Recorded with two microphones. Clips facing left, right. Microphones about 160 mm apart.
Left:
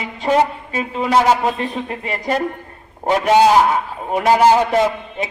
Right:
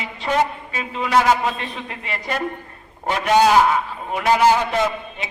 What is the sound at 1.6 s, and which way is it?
A man's voice, 40° left (ahead or behind).